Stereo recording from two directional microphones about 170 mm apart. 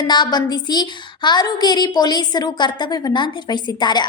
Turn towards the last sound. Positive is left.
turn(degrees=25)  # may be behind; listen again after turning